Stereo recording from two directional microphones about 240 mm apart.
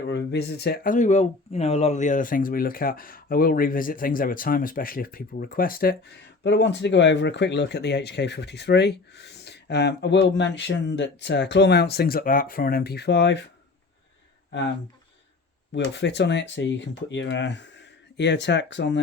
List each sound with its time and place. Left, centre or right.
0.1 s speech: left
15.7 s speech: left